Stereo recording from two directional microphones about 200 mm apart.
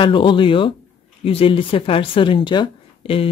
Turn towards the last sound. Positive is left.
turn(degrees=25)  # may be behind; listen again after turning